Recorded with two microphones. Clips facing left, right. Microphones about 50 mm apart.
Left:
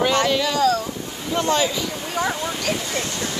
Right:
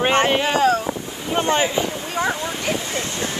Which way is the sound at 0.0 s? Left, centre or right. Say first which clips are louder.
Right 2 dB; right.